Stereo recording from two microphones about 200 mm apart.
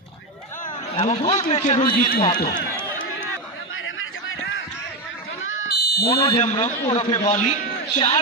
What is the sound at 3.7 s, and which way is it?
Basketball bounce, 85° left.